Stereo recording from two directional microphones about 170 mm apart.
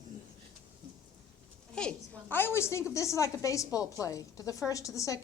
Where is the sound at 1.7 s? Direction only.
5° left (ahead or behind).